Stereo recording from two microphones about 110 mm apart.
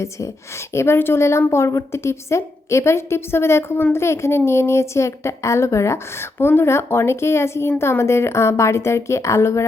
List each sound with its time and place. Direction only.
0.7 s a woman's voice: 25° left (ahead or behind)